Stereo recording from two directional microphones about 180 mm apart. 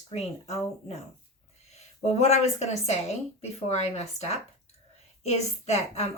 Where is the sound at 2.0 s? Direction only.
35° left (ahead or behind).